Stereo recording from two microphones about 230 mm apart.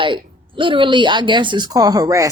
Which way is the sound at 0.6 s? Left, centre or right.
Right.